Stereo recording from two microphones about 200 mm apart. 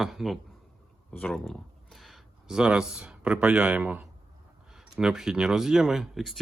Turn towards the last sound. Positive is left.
turn(degrees=0)  # may be behind; listen again after turning